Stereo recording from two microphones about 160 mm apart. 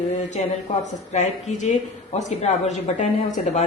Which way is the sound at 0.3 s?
45° left (ahead or behind).